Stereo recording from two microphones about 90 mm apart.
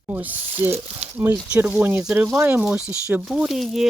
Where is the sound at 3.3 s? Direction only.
5° right (ahead or behind).